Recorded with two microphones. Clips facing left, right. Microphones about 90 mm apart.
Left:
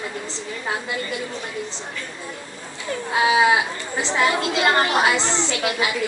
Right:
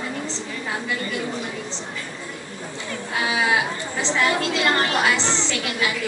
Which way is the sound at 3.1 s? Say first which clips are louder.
Left 5 dB; 20° left (ahead or behind).